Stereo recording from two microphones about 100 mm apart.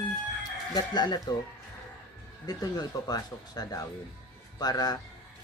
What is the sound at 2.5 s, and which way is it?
Speech, 40° left (ahead or behind).